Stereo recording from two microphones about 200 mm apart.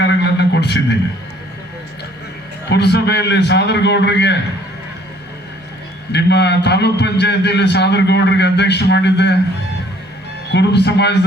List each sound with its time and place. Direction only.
0.0 s a sound: 60° left (ahead or behind)
2.6 s a man's voice: 55° left (ahead or behind)
6.1 s a man's voice: 60° left (ahead or behind)
10.5 s a man's voice: 60° left (ahead or behind)